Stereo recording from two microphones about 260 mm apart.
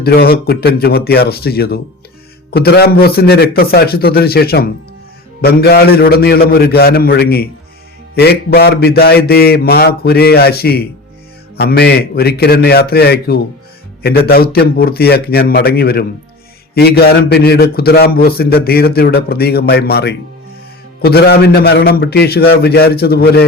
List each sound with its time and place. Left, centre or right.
0.0 s a man's voice: left